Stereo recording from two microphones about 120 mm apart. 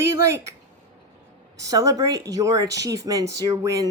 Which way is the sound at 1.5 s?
30° right (ahead or behind).